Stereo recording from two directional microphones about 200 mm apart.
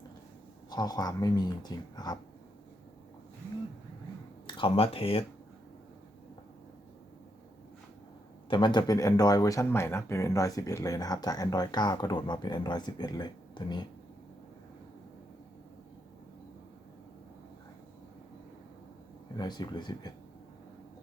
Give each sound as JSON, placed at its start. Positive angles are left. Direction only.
{"t": 0.7, "sound": "speech", "side_deg": 20}
{"t": 4.4, "sound": "speech", "side_deg": 25}
{"t": 8.4, "sound": "speech", "side_deg": 25}
{"t": 19.4, "sound": "speech", "side_deg": 20}